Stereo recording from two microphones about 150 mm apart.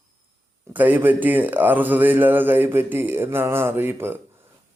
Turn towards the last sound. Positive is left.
turn(degrees=-15)  # may be behind; listen again after turning